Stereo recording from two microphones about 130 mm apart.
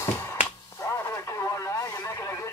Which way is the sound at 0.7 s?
20° left (ahead or behind).